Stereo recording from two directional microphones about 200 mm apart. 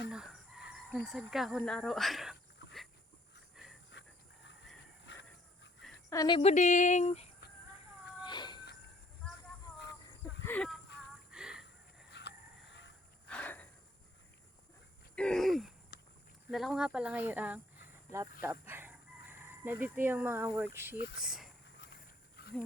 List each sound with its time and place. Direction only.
0.1 s speech: 5° right (ahead or behind)
6.1 s speech: 20° left (ahead or behind)
6.5 s speech: 35° left (ahead or behind)
8.2 s cat: 20° left (ahead or behind)
10.4 s speech: 5° left (ahead or behind)
11.3 s a sound: 5° right (ahead or behind)
12.1 s honk: 60° left (ahead or behind)
13.2 s a sound: 5° left (ahead or behind)
15.1 s a sound: 5° left (ahead or behind)
15.9 s walk: 55° left (ahead or behind)
16.5 s speech: centre (ahead or behind)